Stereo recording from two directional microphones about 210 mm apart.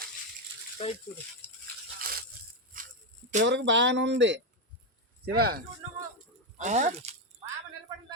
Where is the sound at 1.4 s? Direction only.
10° left (ahead or behind).